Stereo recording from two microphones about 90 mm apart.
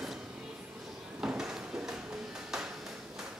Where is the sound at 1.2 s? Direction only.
5° right (ahead or behind).